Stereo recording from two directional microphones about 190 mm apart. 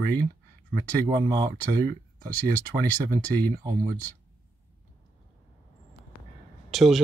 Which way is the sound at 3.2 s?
10° left (ahead or behind).